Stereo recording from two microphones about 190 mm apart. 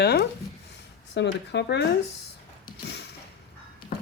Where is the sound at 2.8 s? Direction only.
60° left (ahead or behind).